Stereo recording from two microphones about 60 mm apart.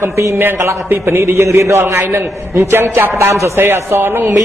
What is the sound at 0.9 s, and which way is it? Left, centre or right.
A man's voice, right.